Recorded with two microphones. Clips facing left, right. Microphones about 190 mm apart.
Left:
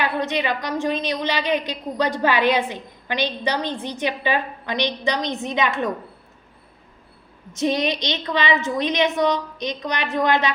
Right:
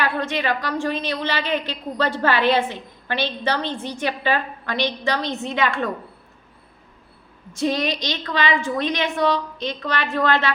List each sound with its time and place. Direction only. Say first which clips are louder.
0.0 s a woman's voice: left 1 dB; 20° left (ahead or behind)
7.5 s a woman's voice: left 1 dB; 20° left (ahead or behind)